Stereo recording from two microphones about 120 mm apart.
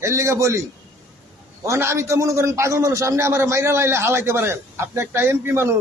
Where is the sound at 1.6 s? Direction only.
25° right (ahead or behind).